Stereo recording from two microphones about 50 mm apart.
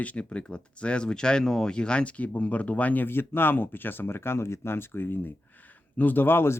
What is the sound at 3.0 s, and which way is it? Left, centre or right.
Speech, left.